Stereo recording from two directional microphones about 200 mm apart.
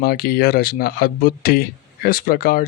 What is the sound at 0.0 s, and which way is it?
Speech, 50° left (ahead or behind).